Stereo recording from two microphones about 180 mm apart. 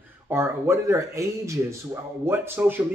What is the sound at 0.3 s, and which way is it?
Speech, 15° right (ahead or behind).